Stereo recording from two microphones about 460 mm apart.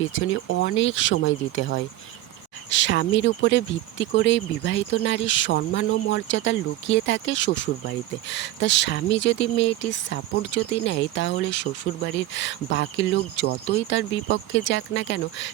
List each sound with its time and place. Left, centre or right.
0.0 s speech: left